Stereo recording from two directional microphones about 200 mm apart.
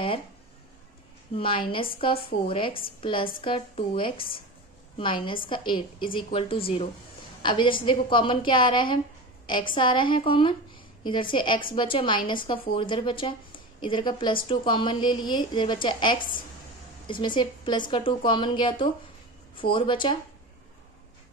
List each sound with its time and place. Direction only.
1.3 s a woman's voice: 25° left (ahead or behind)